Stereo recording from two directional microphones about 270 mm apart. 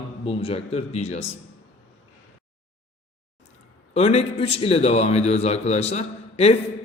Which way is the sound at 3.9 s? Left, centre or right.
Left.